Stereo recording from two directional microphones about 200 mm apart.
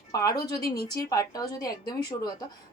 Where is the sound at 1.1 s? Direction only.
20° left (ahead or behind).